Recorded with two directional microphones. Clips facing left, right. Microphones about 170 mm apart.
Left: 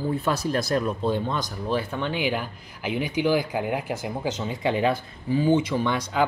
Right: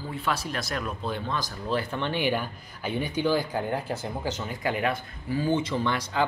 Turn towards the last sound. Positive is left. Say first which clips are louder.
# left 3 dB
turn(degrees=15)  # may be behind; listen again after turning